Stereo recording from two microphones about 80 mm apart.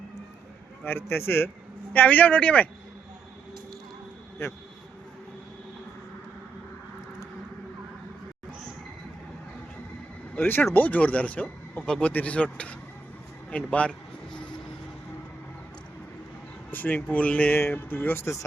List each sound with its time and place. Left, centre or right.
0.9 s a man's voice: left
1.9 s speech: left
10.3 s speech: left
16.7 s speech: centre; by 18.4 s left